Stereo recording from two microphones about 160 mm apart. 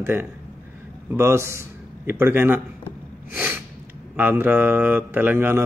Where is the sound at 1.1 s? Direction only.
15° right (ahead or behind).